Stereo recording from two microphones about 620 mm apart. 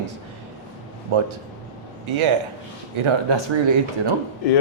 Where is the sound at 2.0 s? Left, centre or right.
Right.